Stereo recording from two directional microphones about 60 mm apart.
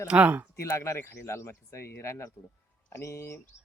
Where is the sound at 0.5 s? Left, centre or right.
Left.